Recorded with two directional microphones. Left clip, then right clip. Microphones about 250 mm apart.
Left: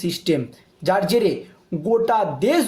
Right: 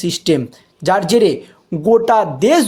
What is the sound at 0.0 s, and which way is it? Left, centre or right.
Speech, right.